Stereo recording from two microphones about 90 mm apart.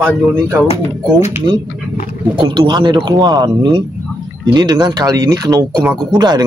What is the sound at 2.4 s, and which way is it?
A man's voice, 55° right (ahead or behind).